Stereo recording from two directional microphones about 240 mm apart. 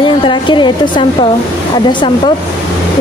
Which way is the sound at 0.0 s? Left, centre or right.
Centre.